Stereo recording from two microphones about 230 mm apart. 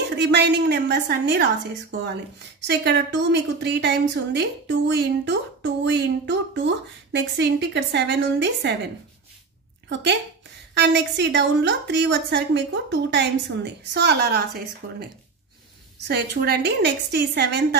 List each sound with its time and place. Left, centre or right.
0.2 s a woman's voice: right
10.7 s a woman's voice: right
16.1 s a woman's voice: right